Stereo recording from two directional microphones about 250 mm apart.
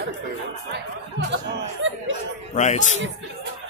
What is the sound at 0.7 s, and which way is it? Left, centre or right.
Speech, right.